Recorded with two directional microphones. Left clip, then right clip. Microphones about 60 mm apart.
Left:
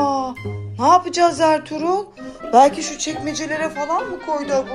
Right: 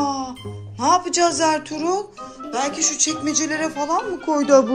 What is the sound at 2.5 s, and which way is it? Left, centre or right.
Speech, centre.